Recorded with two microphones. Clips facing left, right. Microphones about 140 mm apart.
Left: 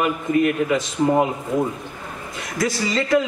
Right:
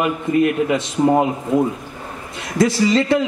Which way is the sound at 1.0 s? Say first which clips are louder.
Right 4 dB; 35° right (ahead or behind).